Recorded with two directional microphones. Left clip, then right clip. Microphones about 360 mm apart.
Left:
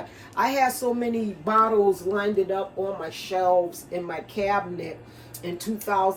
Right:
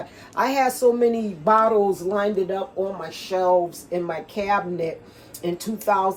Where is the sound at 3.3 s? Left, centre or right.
Centre.